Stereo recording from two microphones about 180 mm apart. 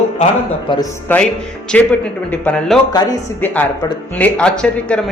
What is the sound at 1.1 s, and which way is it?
Speech, 10° left (ahead or behind).